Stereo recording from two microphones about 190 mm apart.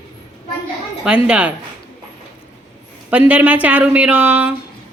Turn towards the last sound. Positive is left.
turn(degrees=-5)  # may be behind; listen again after turning